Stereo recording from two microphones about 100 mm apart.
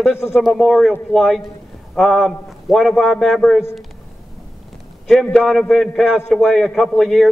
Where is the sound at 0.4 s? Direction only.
Centre (ahead or behind).